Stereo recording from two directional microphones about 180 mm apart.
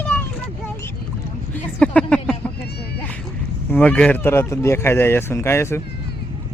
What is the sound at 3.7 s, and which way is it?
Speech, 10° left (ahead or behind).